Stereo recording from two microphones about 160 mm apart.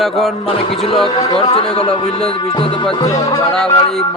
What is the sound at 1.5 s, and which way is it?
Speech, 40° left (ahead or behind).